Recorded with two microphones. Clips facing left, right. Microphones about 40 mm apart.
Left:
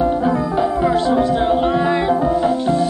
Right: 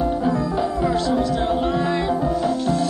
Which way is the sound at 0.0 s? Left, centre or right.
Left.